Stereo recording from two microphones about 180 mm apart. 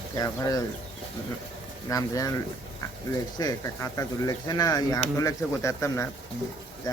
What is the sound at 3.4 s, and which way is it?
Speech, 15° left (ahead or behind).